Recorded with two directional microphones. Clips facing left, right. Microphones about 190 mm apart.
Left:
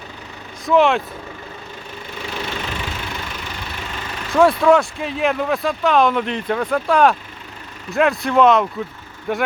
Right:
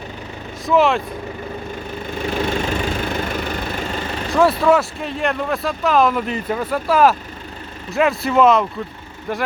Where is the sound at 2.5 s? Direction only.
45° right (ahead or behind).